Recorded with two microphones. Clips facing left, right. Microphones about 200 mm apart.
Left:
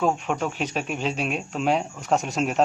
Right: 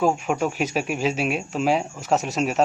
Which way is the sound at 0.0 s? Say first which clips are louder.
Right 3 dB; 5° right (ahead or behind).